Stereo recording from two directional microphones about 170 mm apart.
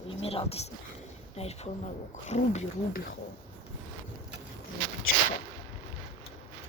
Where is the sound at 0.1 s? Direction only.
35° left (ahead or behind).